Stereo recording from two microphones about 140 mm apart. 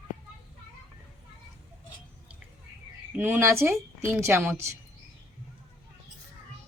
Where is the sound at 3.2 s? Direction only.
15° right (ahead or behind).